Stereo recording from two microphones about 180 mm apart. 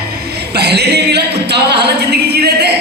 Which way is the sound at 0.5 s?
65° right (ahead or behind).